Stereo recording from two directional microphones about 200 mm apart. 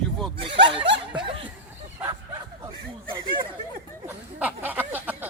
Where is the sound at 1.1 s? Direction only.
25° right (ahead or behind).